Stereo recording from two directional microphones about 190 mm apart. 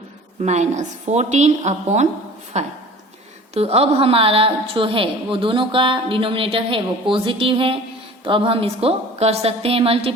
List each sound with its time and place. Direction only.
0.4 s a woman's voice: 35° right (ahead or behind)